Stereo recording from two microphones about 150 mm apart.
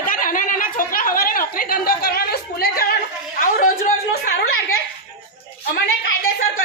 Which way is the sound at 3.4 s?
70° left (ahead or behind).